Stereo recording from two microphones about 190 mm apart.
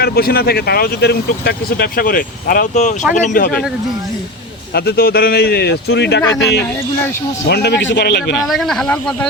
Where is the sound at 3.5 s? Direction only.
5° left (ahead or behind).